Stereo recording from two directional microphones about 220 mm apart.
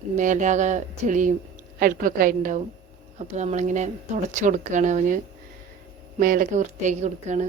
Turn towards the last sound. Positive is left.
turn(degrees=-30)  # may be behind; listen again after turning